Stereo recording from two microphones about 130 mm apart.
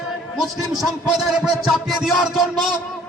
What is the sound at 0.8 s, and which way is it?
Music, centre (ahead or behind).